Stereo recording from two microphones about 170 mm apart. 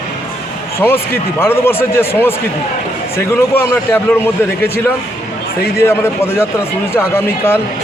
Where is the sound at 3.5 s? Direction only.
15° left (ahead or behind).